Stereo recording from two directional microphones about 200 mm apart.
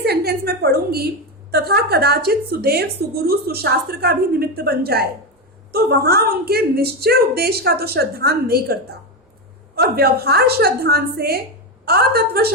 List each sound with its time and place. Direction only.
0.0 s a woman's voice: 55° right (ahead or behind)